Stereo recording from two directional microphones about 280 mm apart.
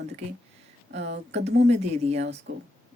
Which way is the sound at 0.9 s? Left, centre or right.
Right.